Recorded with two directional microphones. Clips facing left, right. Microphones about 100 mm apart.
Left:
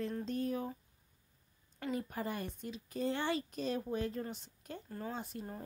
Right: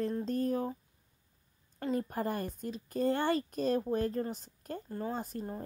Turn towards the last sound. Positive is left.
turn(degrees=-40)  # may be behind; listen again after turning